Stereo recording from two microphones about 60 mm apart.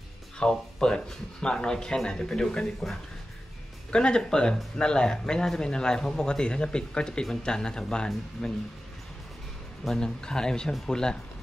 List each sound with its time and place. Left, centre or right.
0.4 s speech: centre
9.8 s speech: centre